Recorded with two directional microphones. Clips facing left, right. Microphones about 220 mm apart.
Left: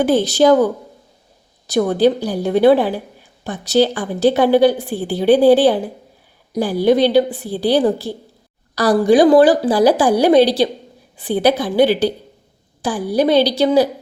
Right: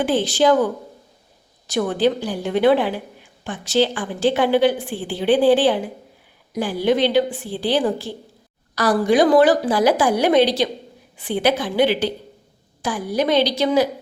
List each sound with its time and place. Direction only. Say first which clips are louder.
0.0 s a woman's voice: left 4 dB; 40° left (ahead or behind)